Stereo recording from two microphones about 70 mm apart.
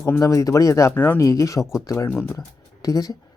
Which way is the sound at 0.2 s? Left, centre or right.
Left.